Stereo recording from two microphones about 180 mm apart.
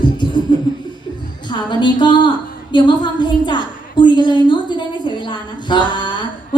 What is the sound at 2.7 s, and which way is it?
A woman's voice, 25° left (ahead or behind).